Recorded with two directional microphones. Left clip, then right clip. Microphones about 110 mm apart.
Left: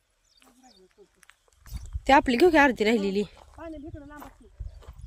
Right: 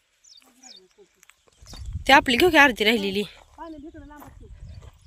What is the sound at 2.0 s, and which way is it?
Speech, 15° left (ahead or behind).